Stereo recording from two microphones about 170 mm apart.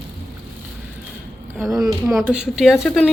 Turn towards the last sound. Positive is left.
turn(degrees=0)  # may be behind; listen again after turning